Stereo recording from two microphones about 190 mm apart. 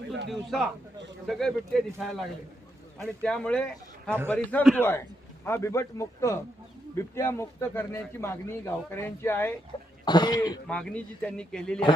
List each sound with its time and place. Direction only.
0.3 s a man's voice: centre (ahead or behind)
3.2 s a man's voice: 5° left (ahead or behind)
9.7 s speech: 20° left (ahead or behind)
10.7 s a man's voice: 5° left (ahead or behind)